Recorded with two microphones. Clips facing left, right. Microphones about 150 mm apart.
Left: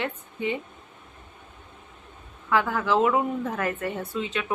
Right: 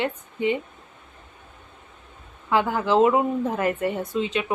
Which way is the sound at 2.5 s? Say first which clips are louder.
Right 2 dB; 20° right (ahead or behind).